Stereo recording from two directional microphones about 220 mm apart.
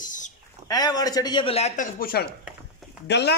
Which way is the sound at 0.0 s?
35° left (ahead or behind).